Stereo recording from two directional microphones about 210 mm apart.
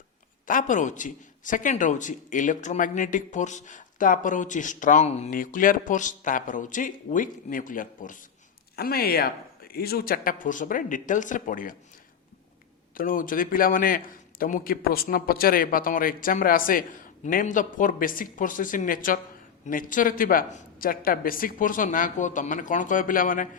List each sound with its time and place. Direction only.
0.4 s a man's voice: 40° left (ahead or behind)
13.0 s a man's voice: 40° left (ahead or behind)